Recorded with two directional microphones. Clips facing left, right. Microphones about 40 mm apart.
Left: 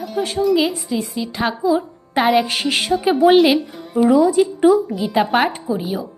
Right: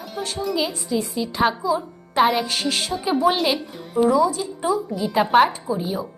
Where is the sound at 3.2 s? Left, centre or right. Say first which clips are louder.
Left 9 dB; centre.